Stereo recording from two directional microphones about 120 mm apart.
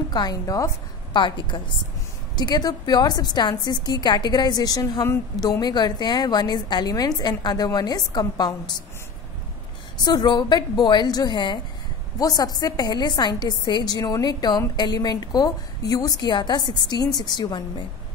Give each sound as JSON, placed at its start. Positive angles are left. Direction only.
{"t": 0.1, "sound": "a woman's voice", "side_deg": 35}
{"t": 1.1, "sound": "a woman's voice", "side_deg": 40}
{"t": 10.0, "sound": "a woman's voice", "side_deg": 35}